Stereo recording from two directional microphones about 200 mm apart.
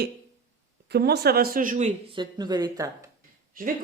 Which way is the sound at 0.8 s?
55° right (ahead or behind).